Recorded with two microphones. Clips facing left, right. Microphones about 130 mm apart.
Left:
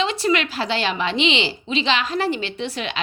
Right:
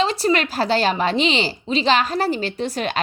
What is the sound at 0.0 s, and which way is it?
Speech, 40° right (ahead or behind).